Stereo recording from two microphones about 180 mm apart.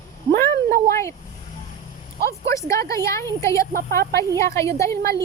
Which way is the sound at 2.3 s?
15° left (ahead or behind).